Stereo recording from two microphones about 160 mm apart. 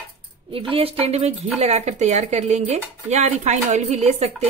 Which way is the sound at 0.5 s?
35° right (ahead or behind).